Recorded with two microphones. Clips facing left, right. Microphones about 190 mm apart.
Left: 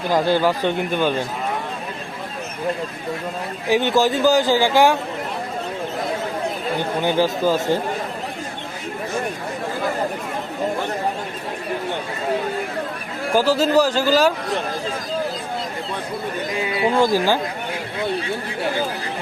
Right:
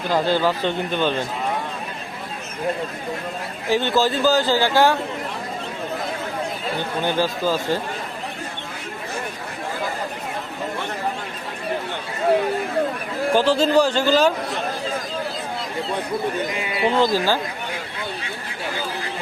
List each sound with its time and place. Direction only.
0.1 s speech: 15° left (ahead or behind)
3.7 s speech: 15° left (ahead or behind)
6.7 s speech: 15° left (ahead or behind)
13.3 s speech: 10° left (ahead or behind)
16.9 s speech: 10° left (ahead or behind)